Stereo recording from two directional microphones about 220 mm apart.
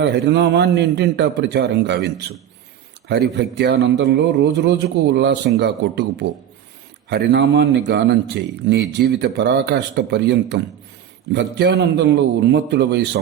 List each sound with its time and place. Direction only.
0.0 s a man's voice: 50° right (ahead or behind)